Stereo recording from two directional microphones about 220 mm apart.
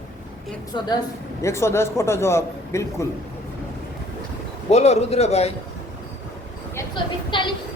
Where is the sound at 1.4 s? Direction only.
10° left (ahead or behind).